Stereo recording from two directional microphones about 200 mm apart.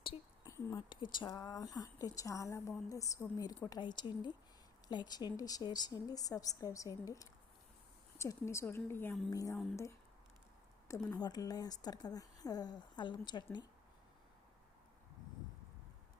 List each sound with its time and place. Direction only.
0.0 s a sound: 25° left (ahead or behind)
0.5 s a woman's voice: 20° left (ahead or behind)
9.3 s a woman's voice: 15° left (ahead or behind)
10.8 s speech: 15° left (ahead or behind)